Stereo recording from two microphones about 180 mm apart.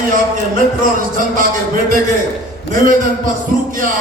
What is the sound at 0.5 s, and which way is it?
A man's voice, 50° right (ahead or behind).